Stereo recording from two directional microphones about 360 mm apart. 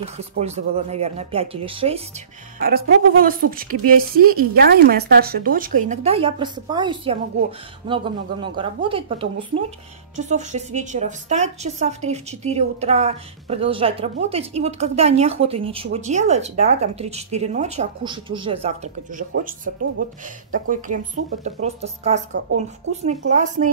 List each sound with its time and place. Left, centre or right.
0.4 s a woman's voice: centre